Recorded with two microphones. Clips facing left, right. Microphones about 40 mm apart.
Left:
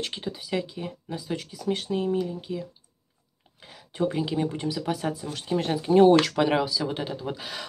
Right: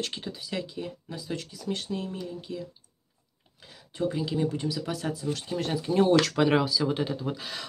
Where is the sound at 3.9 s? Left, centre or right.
Left.